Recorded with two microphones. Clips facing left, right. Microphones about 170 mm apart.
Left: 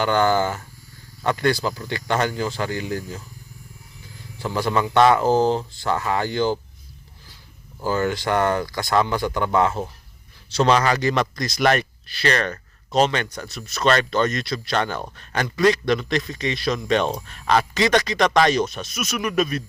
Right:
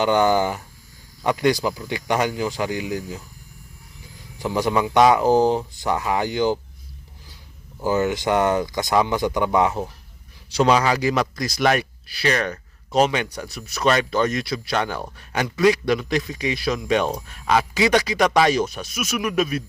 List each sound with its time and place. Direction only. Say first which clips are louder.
0.0 s speech: right 1 dB; 15° right (ahead or behind)
4.4 s speech: right 1 dB; 15° right (ahead or behind)
7.8 s speech: right 2 dB; 15° right (ahead or behind)